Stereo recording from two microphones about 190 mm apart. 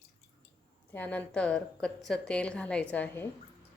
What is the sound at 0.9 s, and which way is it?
A woman's voice, 10° left (ahead or behind).